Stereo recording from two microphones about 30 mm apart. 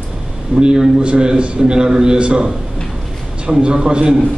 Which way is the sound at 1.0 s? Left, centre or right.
Right.